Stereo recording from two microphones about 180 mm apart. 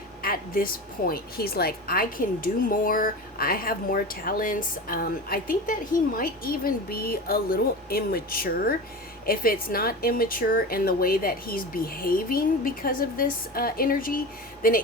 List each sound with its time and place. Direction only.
0.2 s a woman's voice: 55° left (ahead or behind)